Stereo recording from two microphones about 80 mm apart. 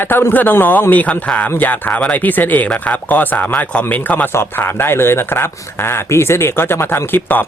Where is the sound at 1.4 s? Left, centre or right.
Left.